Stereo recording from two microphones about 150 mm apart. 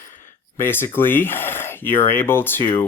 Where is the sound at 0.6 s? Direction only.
15° left (ahead or behind).